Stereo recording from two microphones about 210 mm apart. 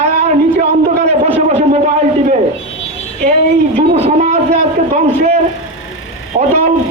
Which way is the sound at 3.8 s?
30° right (ahead or behind).